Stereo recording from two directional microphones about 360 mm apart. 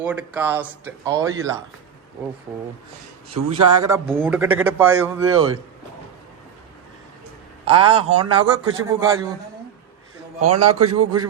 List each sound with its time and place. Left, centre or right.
0.0 s a man's voice: centre
3.5 s a man's voice: centre
7.6 s a man's voice: centre
10.4 s a man's voice: right